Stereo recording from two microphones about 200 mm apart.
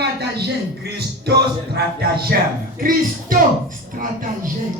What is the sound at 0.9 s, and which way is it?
Music, 55° right (ahead or behind).